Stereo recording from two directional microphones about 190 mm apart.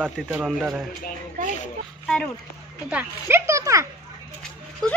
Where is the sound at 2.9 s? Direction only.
10° right (ahead or behind).